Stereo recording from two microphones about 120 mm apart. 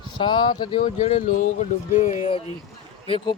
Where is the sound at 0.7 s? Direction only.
55° left (ahead or behind).